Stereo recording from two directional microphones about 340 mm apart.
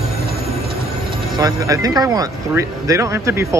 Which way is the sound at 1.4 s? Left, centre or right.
Centre.